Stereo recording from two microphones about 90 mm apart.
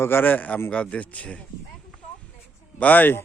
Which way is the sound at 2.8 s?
20° left (ahead or behind).